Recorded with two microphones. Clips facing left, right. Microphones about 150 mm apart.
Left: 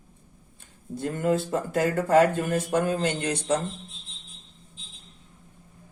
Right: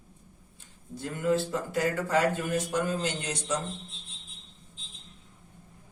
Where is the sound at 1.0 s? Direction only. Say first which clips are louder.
Left 2 dB; 50° left (ahead or behind).